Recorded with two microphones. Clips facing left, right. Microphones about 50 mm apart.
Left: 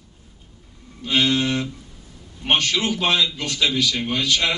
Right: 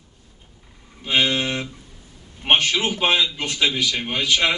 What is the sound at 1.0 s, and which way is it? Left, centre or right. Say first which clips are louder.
A man's voice: left 1 dB; right.